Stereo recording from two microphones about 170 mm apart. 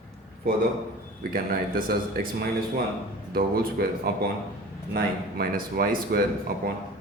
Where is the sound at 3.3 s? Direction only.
65° right (ahead or behind).